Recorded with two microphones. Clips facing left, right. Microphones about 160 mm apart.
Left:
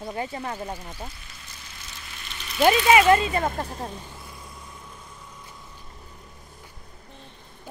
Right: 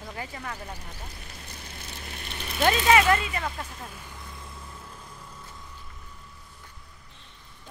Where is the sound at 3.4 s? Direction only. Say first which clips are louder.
Left 7 dB; 40° left (ahead or behind); by 4.2 s 25° left (ahead or behind).